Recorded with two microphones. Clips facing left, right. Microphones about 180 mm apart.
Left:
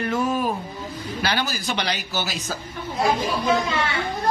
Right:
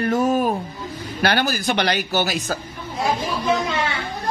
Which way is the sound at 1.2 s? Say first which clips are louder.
Right 6 dB; 55° right (ahead or behind).